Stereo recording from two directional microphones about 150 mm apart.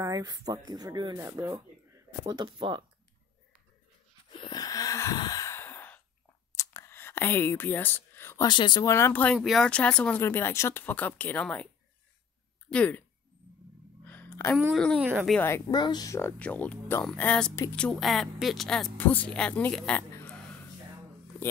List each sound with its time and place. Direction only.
0.0 s speech: 25° right (ahead or behind)
4.4 s gasp: 25° left (ahead or behind)
6.5 s a sound: 20° left (ahead or behind)
8.5 s speech: 30° left (ahead or behind); by 10.2 s 5° left (ahead or behind)
10.2 s a woman's voice: 15° left (ahead or behind)
12.6 s speech: 5° left (ahead or behind)
14.0 s a sound: 15° left (ahead or behind)
14.7 s speech: 5° left (ahead or behind)
15.0 s speech: 15° right (ahead or behind)
15.7 s speech: 30° left (ahead or behind)
16.2 s speech: 10° left (ahead or behind)